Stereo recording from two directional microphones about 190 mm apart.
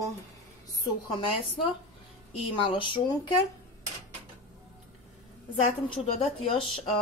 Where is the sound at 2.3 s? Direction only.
25° left (ahead or behind).